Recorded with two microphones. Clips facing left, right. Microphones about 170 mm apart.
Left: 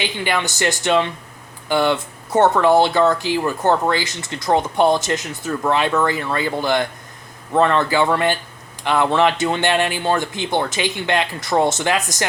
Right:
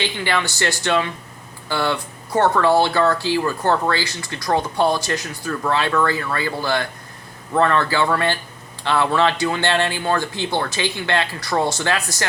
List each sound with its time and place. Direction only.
0.0 s speech: 15° left (ahead or behind)